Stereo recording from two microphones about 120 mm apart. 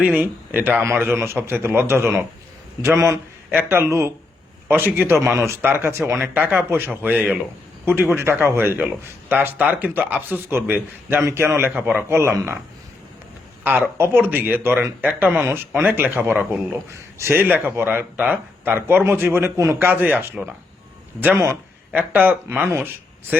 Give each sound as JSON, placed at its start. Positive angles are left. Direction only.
{"t": 0.0, "sound": "a man's voice", "side_deg": -15}
{"t": 13.7, "sound": "a man's voice", "side_deg": -15}